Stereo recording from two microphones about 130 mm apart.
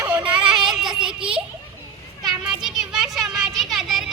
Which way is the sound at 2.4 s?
5° right (ahead or behind).